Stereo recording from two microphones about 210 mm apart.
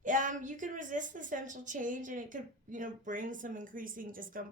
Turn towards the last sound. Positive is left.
turn(degrees=-40)  # may be behind; listen again after turning